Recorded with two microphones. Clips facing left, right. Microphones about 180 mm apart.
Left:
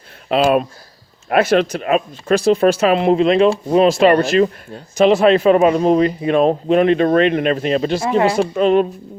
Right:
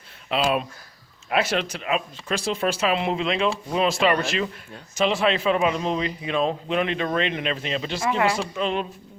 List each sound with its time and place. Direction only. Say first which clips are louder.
0.3 s speech: left 9 dB; 50° left (ahead or behind); by 8.4 s 35° left (ahead or behind)
8.4 s speech: left 12 dB; 50° left (ahead or behind)